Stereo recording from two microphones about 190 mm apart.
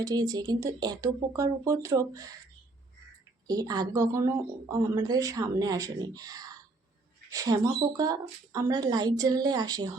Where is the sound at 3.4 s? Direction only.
20° right (ahead or behind).